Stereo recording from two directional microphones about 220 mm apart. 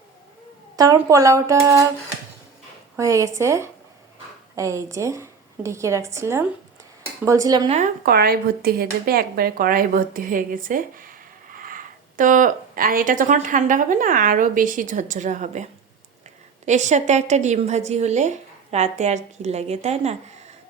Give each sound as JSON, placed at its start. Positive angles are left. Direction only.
{"t": 0.8, "sound": "a woman's voice", "side_deg": -15}
{"t": 2.9, "sound": "a woman's voice", "side_deg": -15}
{"t": 7.7, "sound": "speech", "side_deg": -35}
{"t": 16.6, "sound": "speech", "side_deg": -30}